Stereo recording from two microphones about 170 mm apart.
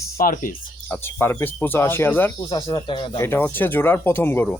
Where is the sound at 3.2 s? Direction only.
15° left (ahead or behind).